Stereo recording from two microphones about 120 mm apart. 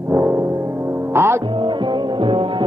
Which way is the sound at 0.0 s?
20° right (ahead or behind).